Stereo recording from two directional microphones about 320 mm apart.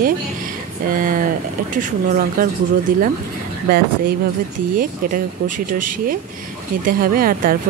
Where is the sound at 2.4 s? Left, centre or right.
Right.